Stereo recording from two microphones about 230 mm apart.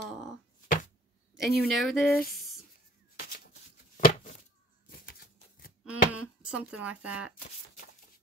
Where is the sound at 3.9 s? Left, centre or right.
Left.